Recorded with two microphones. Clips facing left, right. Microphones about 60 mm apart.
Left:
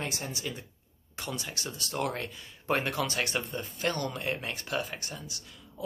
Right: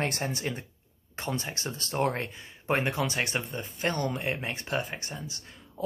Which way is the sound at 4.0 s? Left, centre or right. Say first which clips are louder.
Right 2 dB; right.